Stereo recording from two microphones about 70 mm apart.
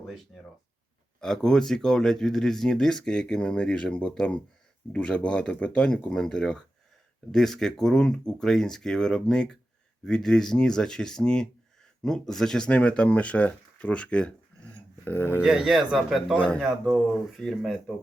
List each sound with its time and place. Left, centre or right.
1.2 s speech: centre
15.0 s speech: left
15.4 s speech: centre
16.3 s speech: centre
16.6 s speech: centre